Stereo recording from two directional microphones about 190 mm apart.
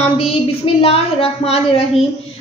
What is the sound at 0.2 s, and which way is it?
A woman's voice, 30° left (ahead or behind).